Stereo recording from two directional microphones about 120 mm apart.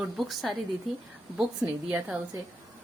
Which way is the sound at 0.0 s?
5° right (ahead or behind).